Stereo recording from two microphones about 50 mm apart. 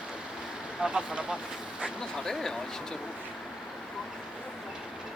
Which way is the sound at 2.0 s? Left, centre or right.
Centre.